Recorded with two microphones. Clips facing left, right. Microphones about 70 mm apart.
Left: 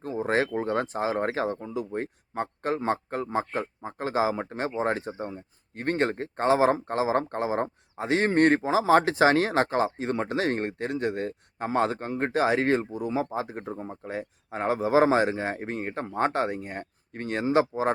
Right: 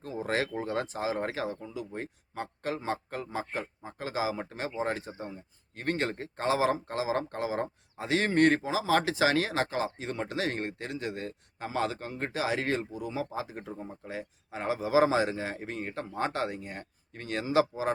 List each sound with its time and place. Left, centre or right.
0.0 s a man's voice: left